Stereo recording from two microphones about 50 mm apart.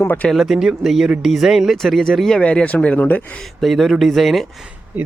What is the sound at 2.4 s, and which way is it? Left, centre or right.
Speech, left.